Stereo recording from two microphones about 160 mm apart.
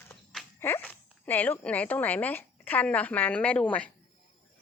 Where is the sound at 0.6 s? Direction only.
10° left (ahead or behind).